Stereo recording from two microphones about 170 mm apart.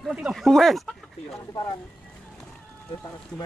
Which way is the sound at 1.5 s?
20° left (ahead or behind).